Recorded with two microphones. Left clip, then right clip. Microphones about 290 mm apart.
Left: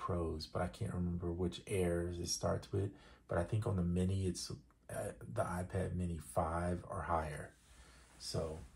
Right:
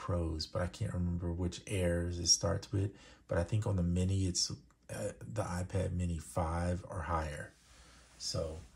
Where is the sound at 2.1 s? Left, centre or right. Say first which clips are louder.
Right 6 dB; right.